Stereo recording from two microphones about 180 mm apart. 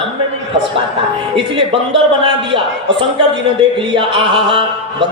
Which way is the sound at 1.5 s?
30° right (ahead or behind).